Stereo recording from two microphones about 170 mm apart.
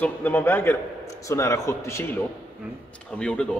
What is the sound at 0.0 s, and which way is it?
A man's voice, 10° left (ahead or behind).